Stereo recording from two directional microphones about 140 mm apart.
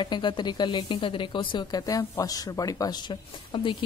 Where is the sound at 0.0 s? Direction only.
35° left (ahead or behind).